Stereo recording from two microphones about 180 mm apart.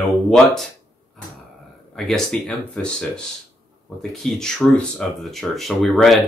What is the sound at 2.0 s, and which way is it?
Speech, centre (ahead or behind).